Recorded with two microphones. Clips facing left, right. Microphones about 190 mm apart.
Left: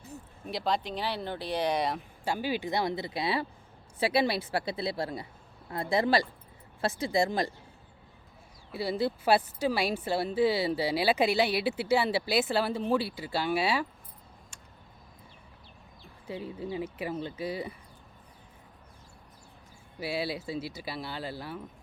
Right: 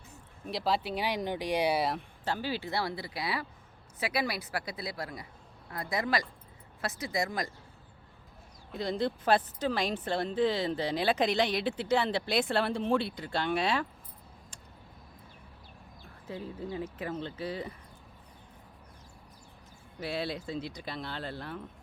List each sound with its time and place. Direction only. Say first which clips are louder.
0.4 s speech: even; centre (ahead or behind)
2.2 s a woman's voice: left 3 dB; 15° left (ahead or behind); by 7.5 s 30° left (ahead or behind)
8.7 s speech: left 2 dB; 5° left (ahead or behind)
16.2 s speech: left 2 dB; 15° left (ahead or behind)
20.0 s speech: left 2 dB; 5° left (ahead or behind)